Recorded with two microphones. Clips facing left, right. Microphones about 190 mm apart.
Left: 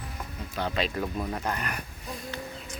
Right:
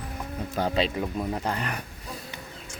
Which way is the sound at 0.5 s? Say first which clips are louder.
Right 4 dB; 40° right (ahead or behind).